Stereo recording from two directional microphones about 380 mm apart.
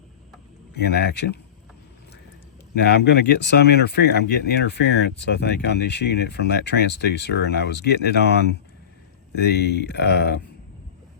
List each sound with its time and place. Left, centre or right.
0.7 s speech: left
2.7 s speech: left